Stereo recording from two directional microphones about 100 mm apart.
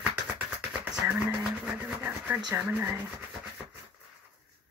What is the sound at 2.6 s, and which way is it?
Speech, 20° right (ahead or behind).